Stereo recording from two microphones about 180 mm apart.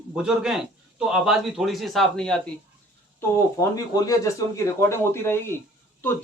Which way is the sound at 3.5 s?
20° left (ahead or behind).